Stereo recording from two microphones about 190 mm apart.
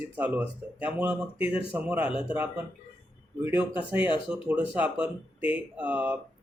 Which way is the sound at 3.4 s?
10° right (ahead or behind).